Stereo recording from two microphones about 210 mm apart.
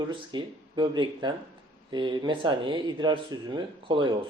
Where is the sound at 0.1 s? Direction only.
20° right (ahead or behind).